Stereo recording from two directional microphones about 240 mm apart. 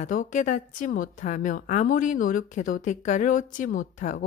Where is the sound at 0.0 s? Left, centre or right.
Left.